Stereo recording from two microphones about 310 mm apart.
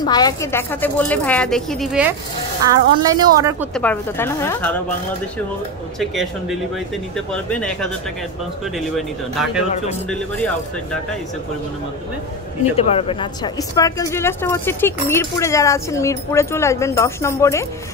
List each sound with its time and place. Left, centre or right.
0.0 s a woman's voice: centre
3.7 s speech: centre
7.2 s speech: centre
12.7 s a woman's voice: centre